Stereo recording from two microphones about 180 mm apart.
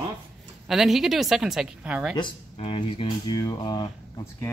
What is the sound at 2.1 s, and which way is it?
Speech, 30° left (ahead or behind).